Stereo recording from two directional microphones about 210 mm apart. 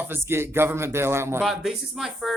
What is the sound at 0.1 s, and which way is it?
Speech, 10° right (ahead or behind).